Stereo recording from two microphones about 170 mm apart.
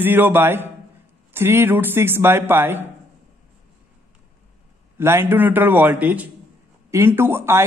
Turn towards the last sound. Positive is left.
turn(degrees=-15)  # may be behind; listen again after turning